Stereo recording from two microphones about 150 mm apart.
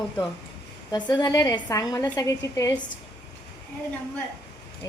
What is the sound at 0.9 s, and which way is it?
A woman's voice, 30° left (ahead or behind).